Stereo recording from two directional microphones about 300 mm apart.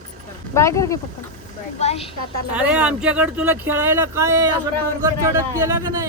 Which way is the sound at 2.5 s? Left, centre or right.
Centre.